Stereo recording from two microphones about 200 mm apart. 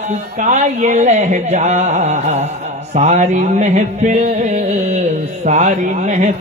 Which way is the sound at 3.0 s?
35° right (ahead or behind).